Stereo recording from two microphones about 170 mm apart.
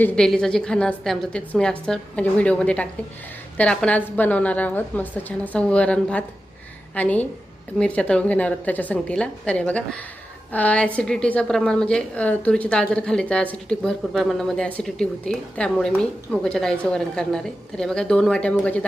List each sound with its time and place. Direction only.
0.0 s a woman's voice: 5° left (ahead or behind)